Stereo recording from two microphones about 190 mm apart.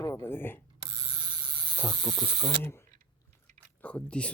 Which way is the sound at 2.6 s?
15° left (ahead or behind).